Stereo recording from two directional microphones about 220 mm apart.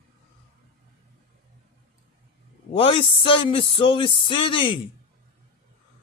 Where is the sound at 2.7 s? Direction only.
25° left (ahead or behind).